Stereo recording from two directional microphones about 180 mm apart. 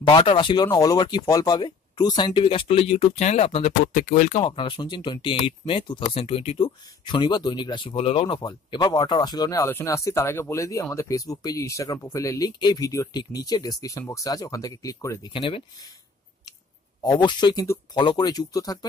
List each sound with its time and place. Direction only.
0.1 s speech: 30° left (ahead or behind)
4.5 s speech: 25° left (ahead or behind)
15.3 s speech: 30° left (ahead or behind)
17.0 s speech: 25° left (ahead or behind)